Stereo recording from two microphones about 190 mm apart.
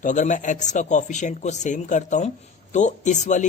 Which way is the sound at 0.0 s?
40° left (ahead or behind).